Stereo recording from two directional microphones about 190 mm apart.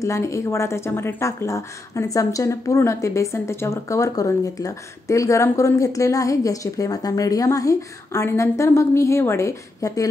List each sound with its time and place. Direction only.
0.0 s speech: 15° left (ahead or behind)